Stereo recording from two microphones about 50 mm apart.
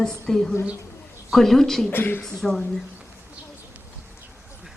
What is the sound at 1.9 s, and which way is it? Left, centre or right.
Speech, left.